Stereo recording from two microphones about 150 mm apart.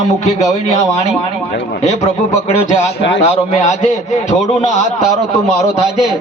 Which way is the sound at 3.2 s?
50° left (ahead or behind).